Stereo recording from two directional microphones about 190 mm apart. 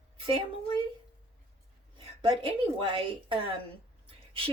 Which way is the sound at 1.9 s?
25° right (ahead or behind).